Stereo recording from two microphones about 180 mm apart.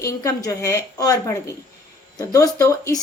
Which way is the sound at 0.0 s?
20° left (ahead or behind).